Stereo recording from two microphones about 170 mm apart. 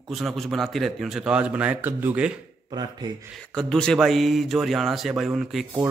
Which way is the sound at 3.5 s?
5° left (ahead or behind).